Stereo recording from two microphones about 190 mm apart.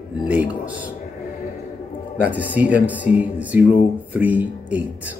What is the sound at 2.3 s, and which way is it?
Speech, 10° right (ahead or behind).